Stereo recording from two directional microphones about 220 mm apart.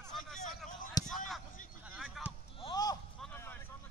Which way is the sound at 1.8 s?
5° right (ahead or behind).